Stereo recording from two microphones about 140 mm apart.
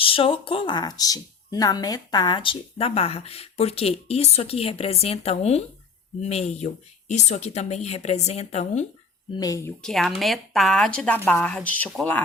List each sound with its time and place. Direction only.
0.0 s speech: 40° left (ahead or behind)
9.8 s speech: centre (ahead or behind)